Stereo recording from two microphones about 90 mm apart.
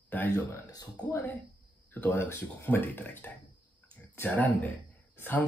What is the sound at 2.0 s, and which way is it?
Speech, 25° left (ahead or behind).